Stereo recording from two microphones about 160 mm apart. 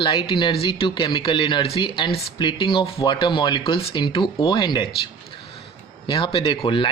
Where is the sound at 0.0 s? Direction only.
30° left (ahead or behind).